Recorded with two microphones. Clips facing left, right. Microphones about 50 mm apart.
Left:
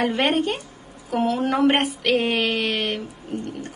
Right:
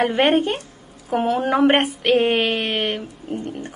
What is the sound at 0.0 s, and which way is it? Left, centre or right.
A woman's voice, right.